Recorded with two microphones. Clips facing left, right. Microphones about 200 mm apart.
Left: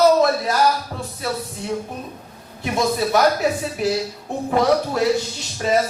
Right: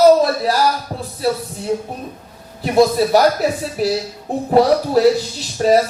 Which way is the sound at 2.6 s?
35° right (ahead or behind).